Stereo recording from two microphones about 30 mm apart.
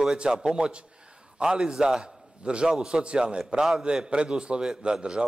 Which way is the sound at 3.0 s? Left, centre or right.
Right.